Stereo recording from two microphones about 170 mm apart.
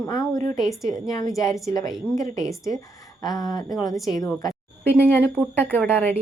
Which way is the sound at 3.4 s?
20° left (ahead or behind).